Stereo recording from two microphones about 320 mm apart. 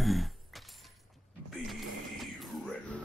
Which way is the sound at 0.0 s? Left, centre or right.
Centre.